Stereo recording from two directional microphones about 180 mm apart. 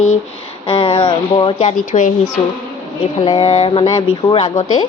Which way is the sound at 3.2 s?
30° left (ahead or behind).